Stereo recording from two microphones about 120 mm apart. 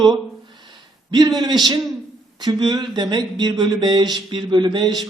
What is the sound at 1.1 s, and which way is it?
A man's voice, 35° right (ahead or behind).